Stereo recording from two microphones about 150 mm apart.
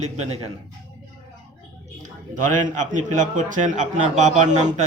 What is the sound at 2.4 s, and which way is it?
Speech, 55° right (ahead or behind).